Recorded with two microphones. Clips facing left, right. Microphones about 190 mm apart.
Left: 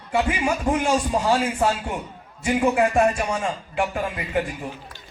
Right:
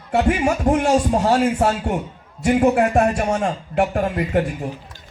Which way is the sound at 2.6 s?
45° right (ahead or behind).